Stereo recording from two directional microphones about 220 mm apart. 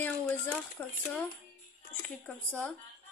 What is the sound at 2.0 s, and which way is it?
Speech, 5° left (ahead or behind).